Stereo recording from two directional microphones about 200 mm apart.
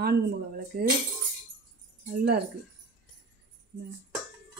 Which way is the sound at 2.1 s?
55° right (ahead or behind).